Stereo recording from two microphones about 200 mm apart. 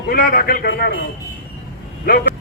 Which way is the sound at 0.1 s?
50° left (ahead or behind).